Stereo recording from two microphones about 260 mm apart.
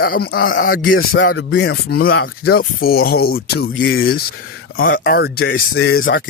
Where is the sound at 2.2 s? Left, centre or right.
Left.